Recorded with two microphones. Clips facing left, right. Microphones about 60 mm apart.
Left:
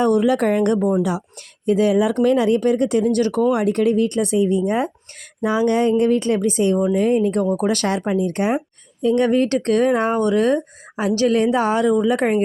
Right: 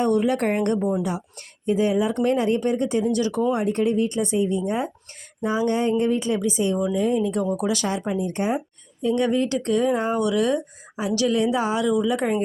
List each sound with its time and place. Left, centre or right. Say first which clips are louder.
0.1 s speech: left 4 dB; left
3.5 s speech: left 4 dB; left
5.4 s speech: left 5 dB; left
10.2 s a woman's voice: left 4 dB; left